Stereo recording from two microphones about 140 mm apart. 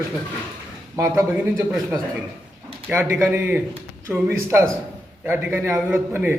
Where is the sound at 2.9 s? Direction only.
20° right (ahead or behind).